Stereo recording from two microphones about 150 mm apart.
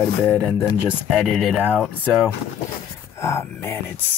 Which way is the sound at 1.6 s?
10° left (ahead or behind).